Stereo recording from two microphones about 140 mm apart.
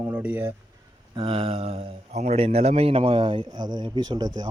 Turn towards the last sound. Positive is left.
turn(degrees=-30)  # may be behind; listen again after turning